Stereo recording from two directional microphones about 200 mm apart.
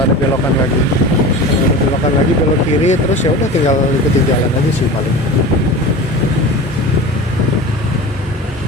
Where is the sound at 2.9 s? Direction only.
35° left (ahead or behind).